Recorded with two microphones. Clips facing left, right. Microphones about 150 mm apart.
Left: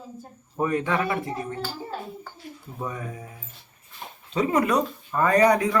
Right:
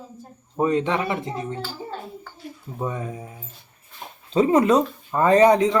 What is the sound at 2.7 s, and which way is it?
Speech, 25° right (ahead or behind).